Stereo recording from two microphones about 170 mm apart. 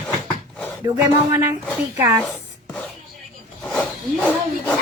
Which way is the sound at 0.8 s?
20° right (ahead or behind).